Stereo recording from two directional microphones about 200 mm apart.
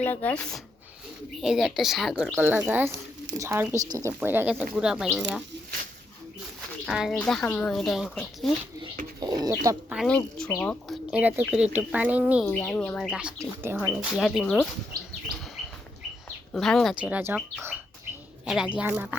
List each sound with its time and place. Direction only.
0.0 s speech: 10° left (ahead or behind)
6.8 s speech: centre (ahead or behind)
9.2 s speech: 20° right (ahead or behind)
9.9 s speech: 5° left (ahead or behind)
12.5 s speech: 10° left (ahead or behind)
16.5 s speech: 5° left (ahead or behind)